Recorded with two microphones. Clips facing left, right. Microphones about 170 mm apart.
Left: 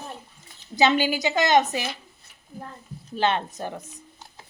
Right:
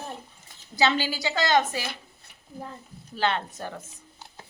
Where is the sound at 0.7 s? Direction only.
20° left (ahead or behind).